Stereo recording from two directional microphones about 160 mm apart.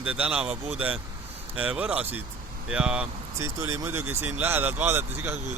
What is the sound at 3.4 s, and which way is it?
Speech, 20° right (ahead or behind).